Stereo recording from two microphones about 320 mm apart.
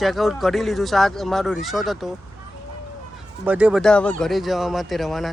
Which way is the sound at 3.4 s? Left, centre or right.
Centre.